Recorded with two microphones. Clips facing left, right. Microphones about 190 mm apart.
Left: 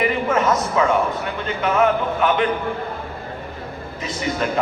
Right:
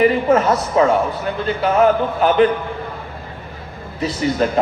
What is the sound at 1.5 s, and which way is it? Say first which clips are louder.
A man's voice: right 4 dB; 35° right (ahead or behind).